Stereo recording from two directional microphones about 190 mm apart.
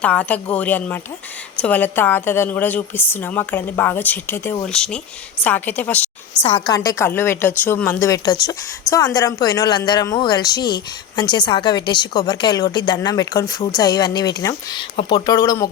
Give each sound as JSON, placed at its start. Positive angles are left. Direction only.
{"t": 0.0, "sound": "a woman's voice", "side_deg": 5}
{"t": 6.4, "sound": "a woman's voice", "side_deg": 25}